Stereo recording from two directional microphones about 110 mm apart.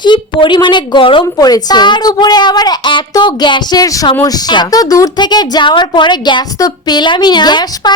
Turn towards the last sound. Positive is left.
turn(degrees=40)  # may be behind; listen again after turning